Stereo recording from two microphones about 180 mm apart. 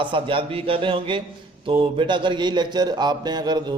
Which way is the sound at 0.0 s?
30° right (ahead or behind).